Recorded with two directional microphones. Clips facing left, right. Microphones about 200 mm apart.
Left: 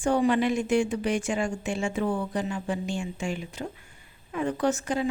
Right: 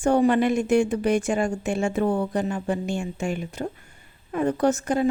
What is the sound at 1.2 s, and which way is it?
A woman's voice, 40° right (ahead or behind).